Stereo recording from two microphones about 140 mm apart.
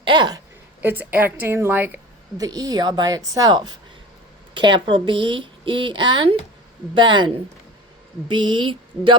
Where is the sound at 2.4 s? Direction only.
25° right (ahead or behind).